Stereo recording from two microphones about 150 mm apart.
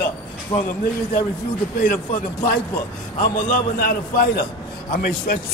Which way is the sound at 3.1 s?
70° left (ahead or behind).